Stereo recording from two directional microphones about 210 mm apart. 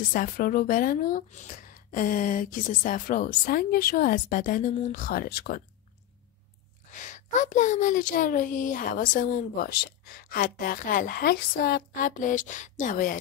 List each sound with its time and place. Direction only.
0.1 s a child's voice: 40° left (ahead or behind)
6.9 s a child's voice: 35° left (ahead or behind)